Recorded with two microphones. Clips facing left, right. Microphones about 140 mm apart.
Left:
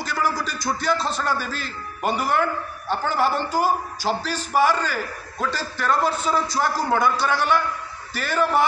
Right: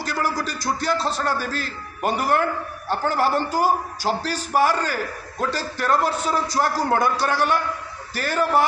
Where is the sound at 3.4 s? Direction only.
40° right (ahead or behind).